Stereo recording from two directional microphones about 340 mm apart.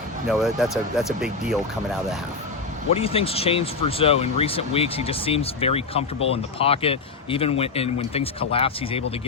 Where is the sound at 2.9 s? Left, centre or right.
Centre.